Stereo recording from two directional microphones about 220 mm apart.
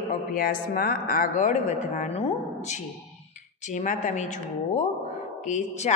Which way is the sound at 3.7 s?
35° left (ahead or behind).